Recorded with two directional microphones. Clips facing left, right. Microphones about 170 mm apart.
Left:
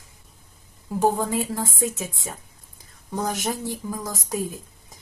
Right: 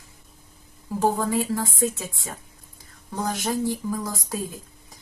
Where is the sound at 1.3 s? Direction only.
20° left (ahead or behind).